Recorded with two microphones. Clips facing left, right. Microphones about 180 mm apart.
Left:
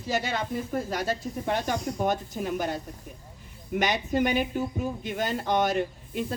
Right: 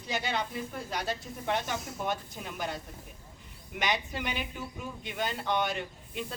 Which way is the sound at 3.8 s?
45° left (ahead or behind).